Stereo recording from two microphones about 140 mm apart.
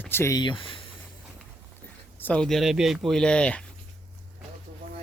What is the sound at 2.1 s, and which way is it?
Speech, 10° left (ahead or behind).